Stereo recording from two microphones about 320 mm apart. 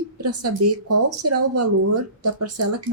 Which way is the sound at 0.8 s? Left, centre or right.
Right.